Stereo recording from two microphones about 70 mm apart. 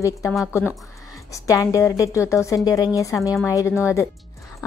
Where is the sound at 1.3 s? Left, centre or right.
Left.